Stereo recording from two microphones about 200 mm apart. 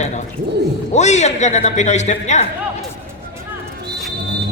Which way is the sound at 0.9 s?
35° left (ahead or behind).